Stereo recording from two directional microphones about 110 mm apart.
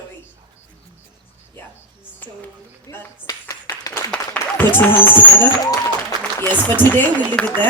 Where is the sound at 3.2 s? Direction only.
35° left (ahead or behind).